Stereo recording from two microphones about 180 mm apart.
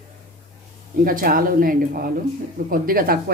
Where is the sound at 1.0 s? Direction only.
50° right (ahead or behind).